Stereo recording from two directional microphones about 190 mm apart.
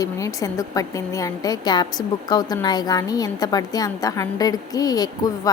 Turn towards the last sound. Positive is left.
turn(degrees=20)  # may be behind; listen again after turning